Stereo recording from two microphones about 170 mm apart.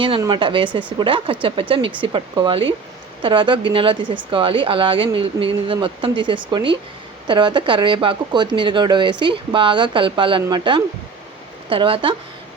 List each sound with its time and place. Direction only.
0.2 s speech: 30° right (ahead or behind)